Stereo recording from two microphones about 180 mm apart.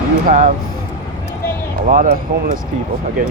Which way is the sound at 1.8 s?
45° right (ahead or behind).